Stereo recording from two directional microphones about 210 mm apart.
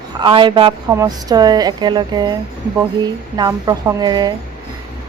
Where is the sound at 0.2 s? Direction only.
20° right (ahead or behind).